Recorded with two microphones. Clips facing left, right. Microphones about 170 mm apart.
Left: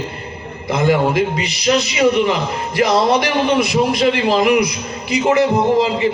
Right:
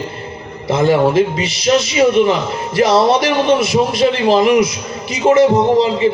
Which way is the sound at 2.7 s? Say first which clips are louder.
Right 3 dB; 25° right (ahead or behind).